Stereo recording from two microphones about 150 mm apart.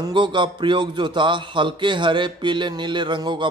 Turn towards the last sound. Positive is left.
turn(degrees=-30)  # may be behind; listen again after turning